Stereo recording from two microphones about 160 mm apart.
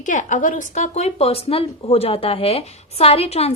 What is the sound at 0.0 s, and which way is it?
A woman's voice, 50° left (ahead or behind).